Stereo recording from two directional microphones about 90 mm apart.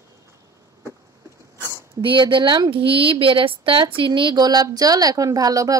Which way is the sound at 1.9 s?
65° right (ahead or behind).